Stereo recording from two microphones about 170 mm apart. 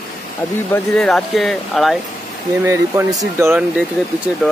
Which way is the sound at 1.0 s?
5° left (ahead or behind).